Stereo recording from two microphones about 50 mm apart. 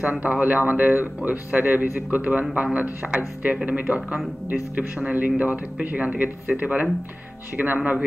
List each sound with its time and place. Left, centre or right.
0.0 s speech: right